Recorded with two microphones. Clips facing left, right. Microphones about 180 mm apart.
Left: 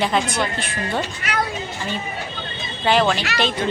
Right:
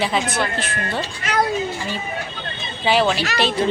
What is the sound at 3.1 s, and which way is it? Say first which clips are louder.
Speech: right 2 dB; 35° right (ahead or behind).